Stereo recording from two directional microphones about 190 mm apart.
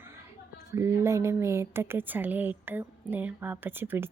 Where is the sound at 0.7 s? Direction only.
15° right (ahead or behind).